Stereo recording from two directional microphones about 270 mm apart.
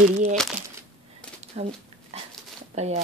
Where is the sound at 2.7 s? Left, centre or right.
Right.